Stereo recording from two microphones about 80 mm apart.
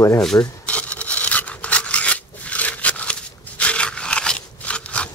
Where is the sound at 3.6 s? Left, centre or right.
Centre.